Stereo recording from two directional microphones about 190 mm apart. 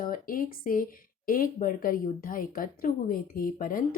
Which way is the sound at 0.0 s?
45° left (ahead or behind).